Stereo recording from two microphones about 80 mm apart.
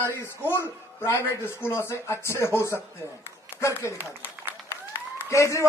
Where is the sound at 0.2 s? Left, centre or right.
Left.